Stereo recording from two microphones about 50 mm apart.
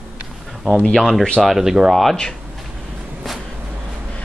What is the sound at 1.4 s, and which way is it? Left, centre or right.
Speech, centre.